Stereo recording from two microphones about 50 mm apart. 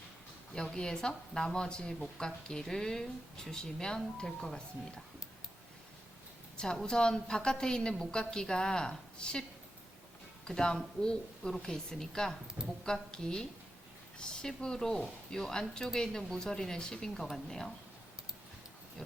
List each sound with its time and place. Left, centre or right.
0.5 s speech: centre
6.6 s speech: centre
10.4 s speech: centre